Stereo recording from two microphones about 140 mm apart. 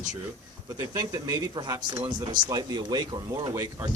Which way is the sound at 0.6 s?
25° right (ahead or behind).